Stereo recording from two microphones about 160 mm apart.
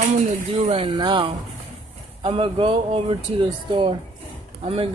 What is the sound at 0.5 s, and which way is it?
Speech, 40° right (ahead or behind).